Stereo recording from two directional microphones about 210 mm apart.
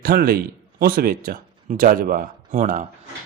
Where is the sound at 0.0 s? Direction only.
45° right (ahead or behind).